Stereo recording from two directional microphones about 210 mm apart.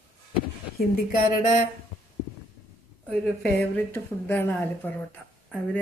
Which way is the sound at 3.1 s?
5° left (ahead or behind).